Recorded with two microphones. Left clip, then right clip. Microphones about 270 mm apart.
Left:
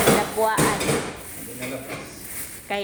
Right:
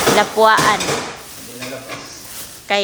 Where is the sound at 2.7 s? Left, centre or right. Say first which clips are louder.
Right 10 dB; right.